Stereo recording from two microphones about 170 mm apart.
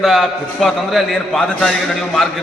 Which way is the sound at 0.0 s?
Centre (ahead or behind).